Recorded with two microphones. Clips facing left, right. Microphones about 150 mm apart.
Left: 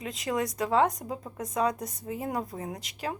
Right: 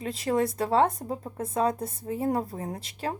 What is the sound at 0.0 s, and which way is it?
Speech, 30° right (ahead or behind).